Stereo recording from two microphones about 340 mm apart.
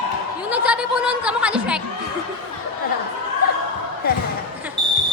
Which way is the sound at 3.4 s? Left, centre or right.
Left.